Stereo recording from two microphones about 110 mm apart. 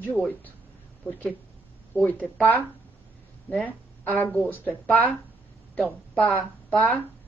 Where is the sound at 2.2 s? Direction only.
15° left (ahead or behind).